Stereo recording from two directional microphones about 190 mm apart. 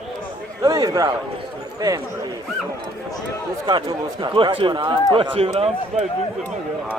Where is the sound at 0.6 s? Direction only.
20° right (ahead or behind).